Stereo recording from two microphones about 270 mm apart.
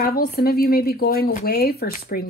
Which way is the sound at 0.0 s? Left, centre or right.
Left.